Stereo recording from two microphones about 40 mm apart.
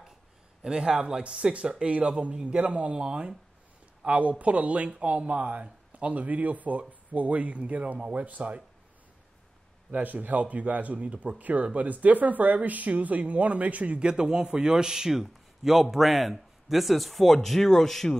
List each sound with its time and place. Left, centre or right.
0.7 s a man's voice: centre
1.2 s a man's voice: right
4.0 s speech: right
9.8 s a man's voice: right
14.0 s a man's voice: centre